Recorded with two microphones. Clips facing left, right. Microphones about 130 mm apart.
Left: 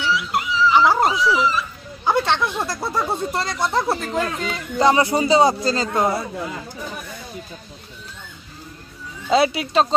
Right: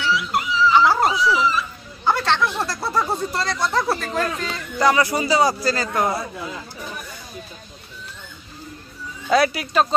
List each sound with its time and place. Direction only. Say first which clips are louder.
0.0 s dog: even; centre (ahead or behind)
2.0 s a sound: left 1 dB; 15° left (ahead or behind)
3.3 s speech: even; 25° left (ahead or behind)
9.3 s speech: left 1 dB; 25° left (ahead or behind)